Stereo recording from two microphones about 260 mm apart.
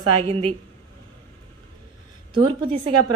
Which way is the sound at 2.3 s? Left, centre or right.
Centre.